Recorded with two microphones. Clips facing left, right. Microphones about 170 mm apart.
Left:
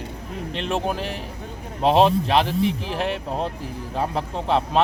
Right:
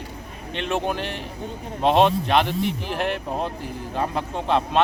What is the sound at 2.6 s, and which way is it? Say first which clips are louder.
Speech: left 2 dB; centre (ahead or behind).